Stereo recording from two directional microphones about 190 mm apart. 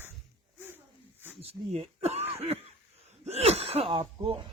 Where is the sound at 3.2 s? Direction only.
35° right (ahead or behind).